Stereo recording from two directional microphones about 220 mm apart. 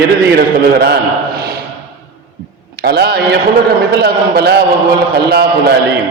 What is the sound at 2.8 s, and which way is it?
A man's voice, 45° right (ahead or behind).